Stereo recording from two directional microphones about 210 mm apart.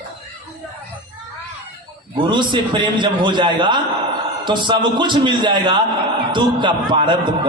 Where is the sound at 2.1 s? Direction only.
20° right (ahead or behind).